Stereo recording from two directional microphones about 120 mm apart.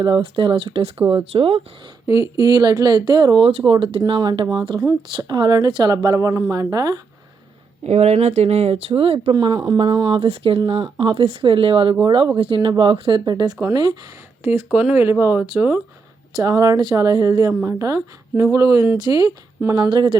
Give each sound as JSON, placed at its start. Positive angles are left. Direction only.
{"t": 0.2, "sound": "speech", "side_deg": -50}
{"t": 2.4, "sound": "a woman's voice", "side_deg": -35}
{"t": 7.9, "sound": "speech", "side_deg": -65}
{"t": 10.2, "sound": "a woman's voice", "side_deg": -50}
{"t": 14.4, "sound": "speech", "side_deg": -15}
{"t": 16.3, "sound": "a woman's voice", "side_deg": -30}